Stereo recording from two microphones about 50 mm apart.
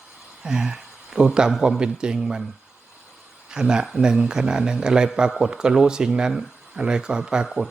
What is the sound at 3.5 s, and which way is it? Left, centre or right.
A man's voice, centre.